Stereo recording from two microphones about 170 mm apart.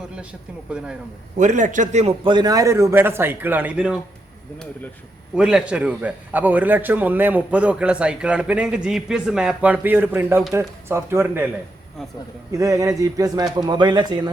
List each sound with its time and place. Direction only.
1.4 s a man's voice: 45° right (ahead or behind)
2.2 s a man's voice: 25° right (ahead or behind); by 3.9 s 10° right (ahead or behind)
5.3 s a man's voice: 5° right (ahead or behind)
12.5 s a man's voice: 20° right (ahead or behind)